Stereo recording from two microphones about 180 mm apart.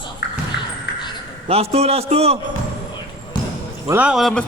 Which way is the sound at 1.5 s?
35° right (ahead or behind).